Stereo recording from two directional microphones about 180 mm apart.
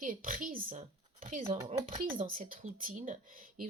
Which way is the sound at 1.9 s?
50° right (ahead or behind).